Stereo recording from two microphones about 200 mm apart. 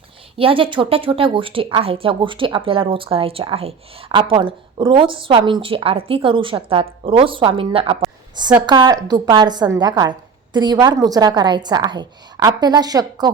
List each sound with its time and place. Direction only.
0.3 s a woman's voice: 25° right (ahead or behind)